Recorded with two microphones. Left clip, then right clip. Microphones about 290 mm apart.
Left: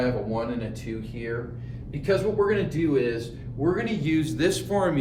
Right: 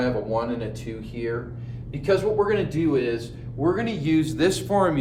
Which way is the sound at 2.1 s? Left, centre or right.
Centre.